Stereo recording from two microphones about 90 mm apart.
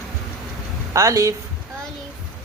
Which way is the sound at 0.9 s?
35° right (ahead or behind).